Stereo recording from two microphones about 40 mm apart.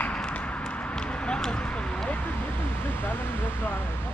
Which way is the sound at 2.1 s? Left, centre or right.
Left.